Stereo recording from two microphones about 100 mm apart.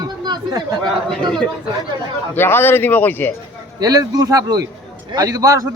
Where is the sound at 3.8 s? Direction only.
40° right (ahead or behind).